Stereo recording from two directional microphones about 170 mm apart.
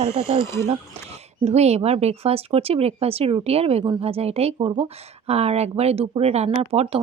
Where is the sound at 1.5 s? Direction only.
40° right (ahead or behind).